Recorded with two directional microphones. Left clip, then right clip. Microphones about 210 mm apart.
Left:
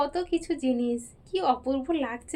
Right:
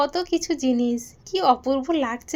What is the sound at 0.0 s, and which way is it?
A woman's voice, 40° right (ahead or behind).